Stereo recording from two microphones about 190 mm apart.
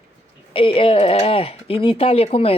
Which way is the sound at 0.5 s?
30° left (ahead or behind).